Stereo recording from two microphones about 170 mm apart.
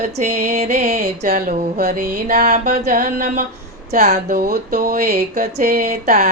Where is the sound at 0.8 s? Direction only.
65° right (ahead or behind).